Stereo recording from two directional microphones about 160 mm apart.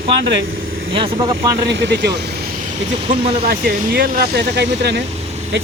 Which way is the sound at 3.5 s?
70° right (ahead or behind).